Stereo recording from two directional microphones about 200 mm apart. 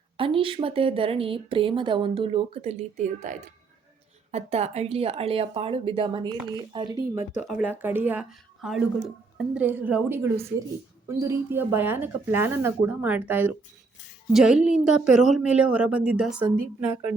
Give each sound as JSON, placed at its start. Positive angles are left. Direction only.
{"t": 0.2, "sound": "speech", "side_deg": -25}
{"t": 7.4, "sound": "a woman's voice", "side_deg": -5}